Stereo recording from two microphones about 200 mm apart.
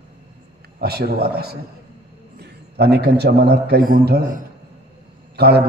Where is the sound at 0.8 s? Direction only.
50° right (ahead or behind).